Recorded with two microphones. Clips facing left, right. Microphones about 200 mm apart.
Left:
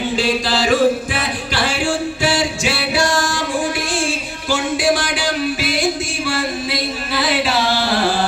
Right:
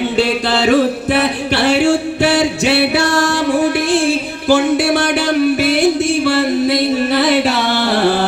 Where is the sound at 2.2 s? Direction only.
60° right (ahead or behind).